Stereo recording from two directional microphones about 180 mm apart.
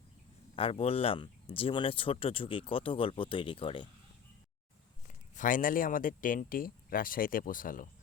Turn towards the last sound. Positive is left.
turn(degrees=50)  # may be behind; listen again after turning